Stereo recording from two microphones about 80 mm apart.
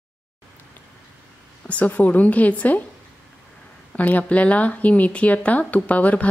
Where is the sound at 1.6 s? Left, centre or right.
Centre.